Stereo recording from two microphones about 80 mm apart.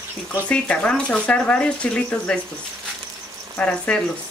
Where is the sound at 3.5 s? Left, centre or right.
Centre.